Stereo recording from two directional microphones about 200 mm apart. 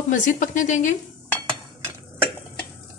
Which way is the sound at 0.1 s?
40° left (ahead or behind).